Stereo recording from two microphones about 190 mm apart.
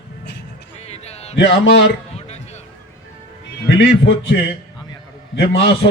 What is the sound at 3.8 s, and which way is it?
A man's voice, 65° left (ahead or behind).